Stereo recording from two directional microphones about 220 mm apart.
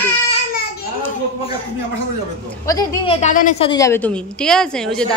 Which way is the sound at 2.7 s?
15° left (ahead or behind).